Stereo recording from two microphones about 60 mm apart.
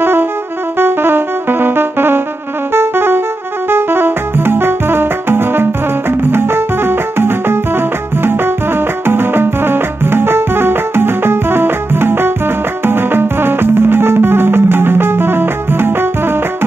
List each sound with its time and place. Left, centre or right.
0.0 s music: right
9.0 s music: right